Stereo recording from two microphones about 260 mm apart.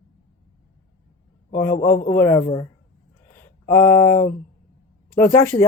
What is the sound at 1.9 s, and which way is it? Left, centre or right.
Speech, centre.